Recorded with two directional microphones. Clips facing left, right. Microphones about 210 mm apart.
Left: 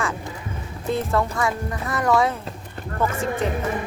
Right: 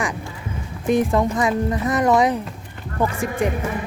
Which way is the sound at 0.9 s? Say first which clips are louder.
Right 5 dB; 15° right (ahead or behind).